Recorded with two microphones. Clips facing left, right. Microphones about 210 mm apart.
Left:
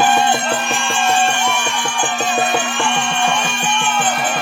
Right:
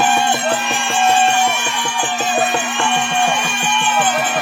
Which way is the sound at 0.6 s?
50° left (ahead or behind).